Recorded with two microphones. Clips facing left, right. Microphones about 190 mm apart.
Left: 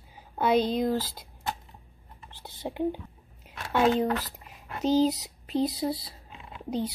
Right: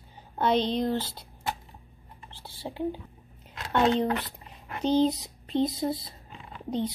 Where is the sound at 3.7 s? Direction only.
5° left (ahead or behind).